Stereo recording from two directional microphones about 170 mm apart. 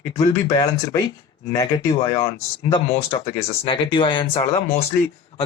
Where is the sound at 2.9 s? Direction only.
35° left (ahead or behind).